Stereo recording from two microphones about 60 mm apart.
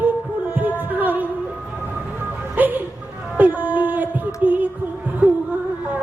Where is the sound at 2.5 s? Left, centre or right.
Right.